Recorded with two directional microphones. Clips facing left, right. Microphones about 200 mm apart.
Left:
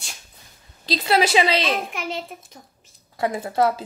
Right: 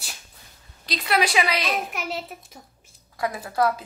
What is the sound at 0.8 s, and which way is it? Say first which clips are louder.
Speech: left 4 dB; 30° left (ahead or behind).